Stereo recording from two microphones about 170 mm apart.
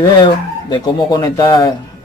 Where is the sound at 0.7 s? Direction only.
25° left (ahead or behind).